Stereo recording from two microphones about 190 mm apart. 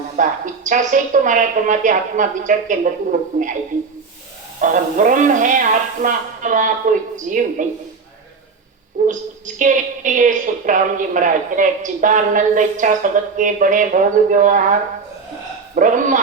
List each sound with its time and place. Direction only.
0.2 s a woman's voice: 45° right (ahead or behind)
4.6 s a woman's voice: 40° right (ahead or behind)
8.9 s a woman's voice: 40° right (ahead or behind)